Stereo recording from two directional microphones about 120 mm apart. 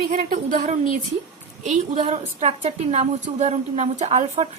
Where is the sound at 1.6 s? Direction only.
70° right (ahead or behind).